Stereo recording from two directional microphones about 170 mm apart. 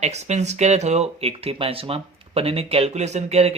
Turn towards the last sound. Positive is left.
turn(degrees=-40)  # may be behind; listen again after turning